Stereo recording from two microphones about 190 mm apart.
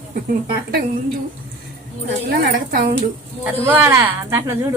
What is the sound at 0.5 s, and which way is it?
Speech, 55° right (ahead or behind).